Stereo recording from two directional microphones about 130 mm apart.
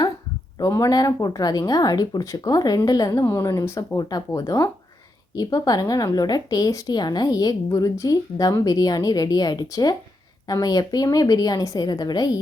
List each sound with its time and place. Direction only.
0.6 s a woman's voice: 25° left (ahead or behind)